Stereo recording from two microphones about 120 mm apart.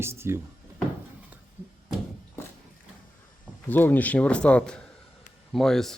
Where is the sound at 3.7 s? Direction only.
15° left (ahead or behind).